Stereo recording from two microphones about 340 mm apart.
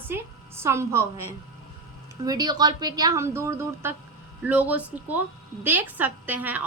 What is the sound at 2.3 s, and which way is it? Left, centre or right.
A woman's voice, centre.